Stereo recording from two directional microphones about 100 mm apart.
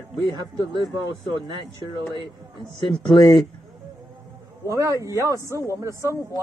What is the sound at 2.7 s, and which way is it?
Speech, 55° left (ahead or behind).